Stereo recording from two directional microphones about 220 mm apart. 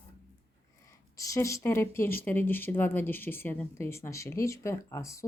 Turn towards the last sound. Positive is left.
turn(degrees=15)  # may be behind; listen again after turning